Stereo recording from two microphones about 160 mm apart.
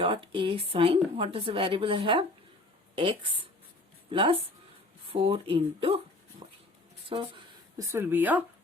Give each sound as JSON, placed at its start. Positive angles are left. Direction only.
{"t": 0.0, "sound": "a woman's voice", "side_deg": -35}
{"t": 7.1, "sound": "speech", "side_deg": -35}
{"t": 7.8, "sound": "speech", "side_deg": -15}